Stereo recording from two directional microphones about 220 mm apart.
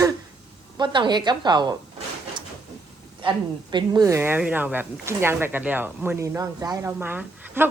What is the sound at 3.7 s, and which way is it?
Speech, 20° right (ahead or behind).